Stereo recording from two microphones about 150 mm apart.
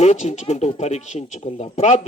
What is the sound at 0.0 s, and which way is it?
Speech, 50° left (ahead or behind).